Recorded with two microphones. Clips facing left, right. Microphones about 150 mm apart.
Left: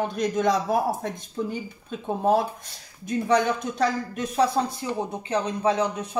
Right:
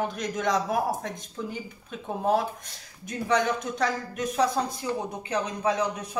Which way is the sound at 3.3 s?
30° left (ahead or behind).